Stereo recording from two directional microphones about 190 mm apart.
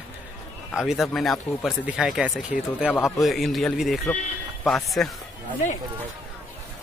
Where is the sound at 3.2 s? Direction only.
Centre (ahead or behind).